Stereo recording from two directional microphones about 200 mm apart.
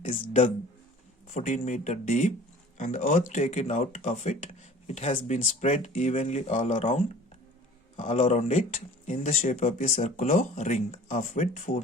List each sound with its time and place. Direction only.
0.1 s speech: 40° left (ahead or behind)